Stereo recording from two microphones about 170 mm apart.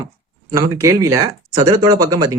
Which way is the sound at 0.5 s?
20° right (ahead or behind).